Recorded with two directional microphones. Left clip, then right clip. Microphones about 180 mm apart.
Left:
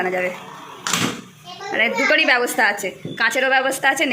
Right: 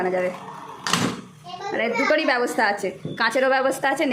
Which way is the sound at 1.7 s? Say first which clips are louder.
Left 4 dB; 10° right (ahead or behind).